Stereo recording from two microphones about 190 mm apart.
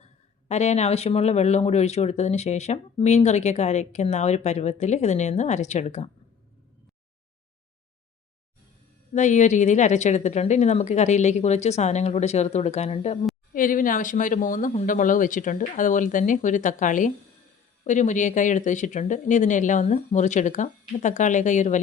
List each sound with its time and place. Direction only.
0.4 s speech: 35° left (ahead or behind)
9.1 s speech: 40° left (ahead or behind)
13.5 s speech: 45° left (ahead or behind)